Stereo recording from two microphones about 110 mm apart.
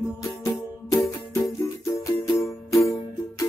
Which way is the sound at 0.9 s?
30° left (ahead or behind).